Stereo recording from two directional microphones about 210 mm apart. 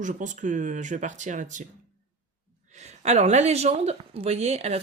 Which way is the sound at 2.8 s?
30° right (ahead or behind).